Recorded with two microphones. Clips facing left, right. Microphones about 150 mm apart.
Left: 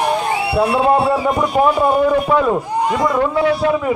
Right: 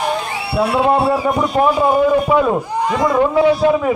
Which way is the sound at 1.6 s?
10° left (ahead or behind).